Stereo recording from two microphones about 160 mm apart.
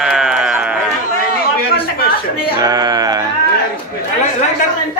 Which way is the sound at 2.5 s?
25° right (ahead or behind).